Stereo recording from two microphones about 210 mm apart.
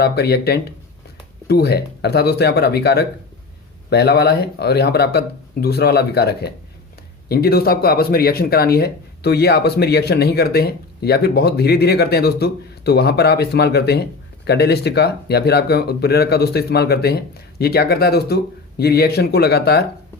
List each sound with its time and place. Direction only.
0.0 s speech: 50° left (ahead or behind)